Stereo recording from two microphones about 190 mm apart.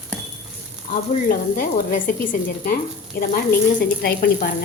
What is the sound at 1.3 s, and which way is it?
Speech, 50° left (ahead or behind).